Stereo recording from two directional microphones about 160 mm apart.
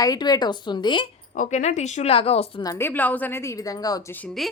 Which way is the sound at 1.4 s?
50° left (ahead or behind).